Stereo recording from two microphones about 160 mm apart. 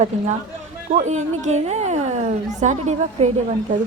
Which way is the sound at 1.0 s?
50° right (ahead or behind).